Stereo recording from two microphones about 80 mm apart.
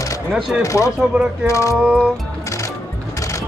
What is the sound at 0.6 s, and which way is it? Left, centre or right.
Speech, left.